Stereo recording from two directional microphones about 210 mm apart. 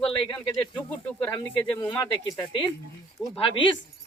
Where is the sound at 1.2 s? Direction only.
10° left (ahead or behind).